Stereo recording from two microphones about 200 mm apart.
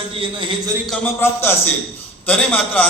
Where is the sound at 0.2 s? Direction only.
25° right (ahead or behind).